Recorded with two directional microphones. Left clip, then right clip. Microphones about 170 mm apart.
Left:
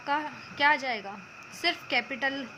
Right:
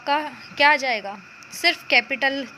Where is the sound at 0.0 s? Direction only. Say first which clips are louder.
Right 7 dB; 25° right (ahead or behind).